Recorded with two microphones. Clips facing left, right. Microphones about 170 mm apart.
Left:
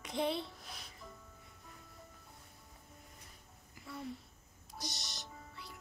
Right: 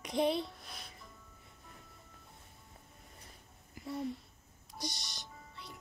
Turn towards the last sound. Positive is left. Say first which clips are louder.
# right 3 dB
turn(degrees=5)  # may be behind; listen again after turning